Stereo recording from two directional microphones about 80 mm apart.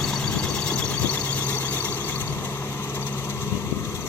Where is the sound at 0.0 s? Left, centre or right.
Centre.